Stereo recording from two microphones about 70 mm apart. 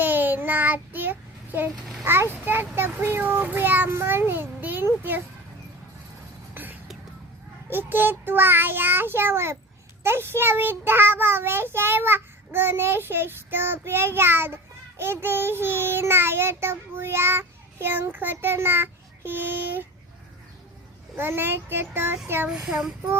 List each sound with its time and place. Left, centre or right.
0.0 s child singing: right
1.7 s a child's voice: centre
2.3 s a child's voice: right
6.5 s music: right
7.7 s a child's voice: right
21.2 s a child's voice: right
22.4 s speech: centre